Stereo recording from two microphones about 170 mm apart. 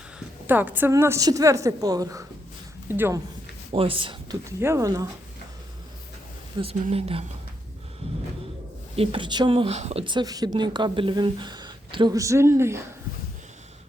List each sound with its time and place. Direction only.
0.4 s a woman's voice: 10° right (ahead or behind)
3.7 s speech: 35° right (ahead or behind)
4.4 s speech: 15° right (ahead or behind)
6.5 s speech: 25° right (ahead or behind)
9.0 s speech: 30° right (ahead or behind)